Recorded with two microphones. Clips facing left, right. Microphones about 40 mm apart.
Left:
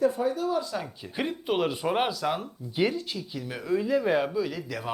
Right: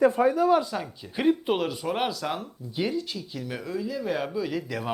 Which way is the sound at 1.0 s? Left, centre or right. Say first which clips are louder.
Right 7 dB; centre.